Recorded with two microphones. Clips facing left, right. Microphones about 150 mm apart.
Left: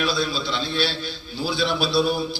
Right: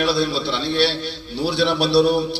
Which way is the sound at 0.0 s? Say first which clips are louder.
Right 4 dB; 70° right (ahead or behind).